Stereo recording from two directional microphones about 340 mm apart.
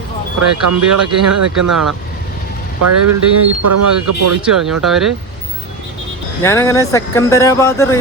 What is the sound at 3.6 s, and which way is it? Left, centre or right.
Speech, right.